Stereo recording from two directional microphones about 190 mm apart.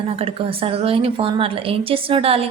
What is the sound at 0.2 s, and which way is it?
A woman's voice, 30° right (ahead or behind).